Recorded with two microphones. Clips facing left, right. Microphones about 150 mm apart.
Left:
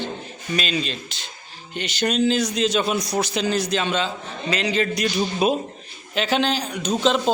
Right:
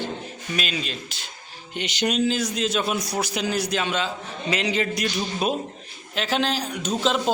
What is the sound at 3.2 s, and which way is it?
Speech, 10° right (ahead or behind).